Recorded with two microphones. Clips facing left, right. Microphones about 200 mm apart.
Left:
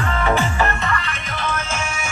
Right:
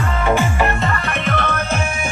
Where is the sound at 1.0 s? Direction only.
60° right (ahead or behind).